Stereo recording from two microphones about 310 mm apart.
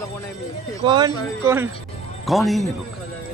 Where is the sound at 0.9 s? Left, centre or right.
Centre.